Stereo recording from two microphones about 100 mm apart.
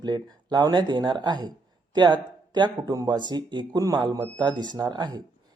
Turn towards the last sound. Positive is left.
turn(degrees=-45)  # may be behind; listen again after turning